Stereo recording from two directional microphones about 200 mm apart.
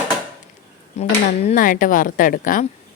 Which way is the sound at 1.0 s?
35° left (ahead or behind).